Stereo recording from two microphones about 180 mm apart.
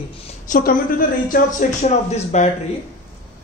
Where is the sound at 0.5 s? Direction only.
50° left (ahead or behind).